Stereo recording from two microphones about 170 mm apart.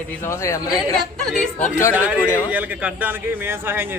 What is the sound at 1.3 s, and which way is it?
Speech, centre (ahead or behind).